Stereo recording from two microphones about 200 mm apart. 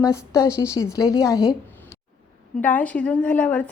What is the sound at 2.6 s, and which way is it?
A woman's voice, 10° left (ahead or behind).